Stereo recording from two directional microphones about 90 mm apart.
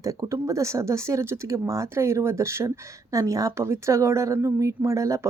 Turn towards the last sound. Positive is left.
turn(degrees=-35)  # may be behind; listen again after turning